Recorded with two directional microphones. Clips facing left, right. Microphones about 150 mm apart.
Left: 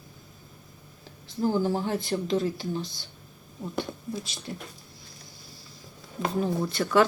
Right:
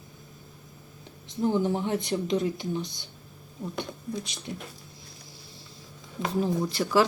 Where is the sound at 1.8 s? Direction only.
20° right (ahead or behind).